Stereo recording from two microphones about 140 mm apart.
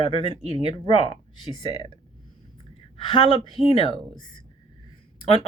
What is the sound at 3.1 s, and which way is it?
Speech, 40° left (ahead or behind).